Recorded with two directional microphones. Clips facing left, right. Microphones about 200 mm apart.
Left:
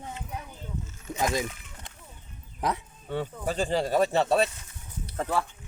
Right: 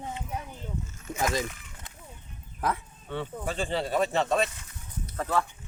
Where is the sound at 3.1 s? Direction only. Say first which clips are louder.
Left 2 dB; 40° left (ahead or behind).